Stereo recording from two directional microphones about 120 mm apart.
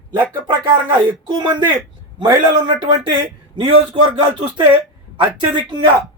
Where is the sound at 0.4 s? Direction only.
40° right (ahead or behind).